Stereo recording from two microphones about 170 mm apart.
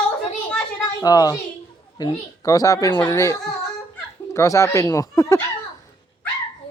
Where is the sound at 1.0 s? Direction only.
20° left (ahead or behind).